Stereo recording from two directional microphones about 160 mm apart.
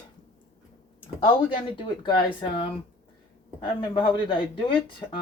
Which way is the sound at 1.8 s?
30° left (ahead or behind).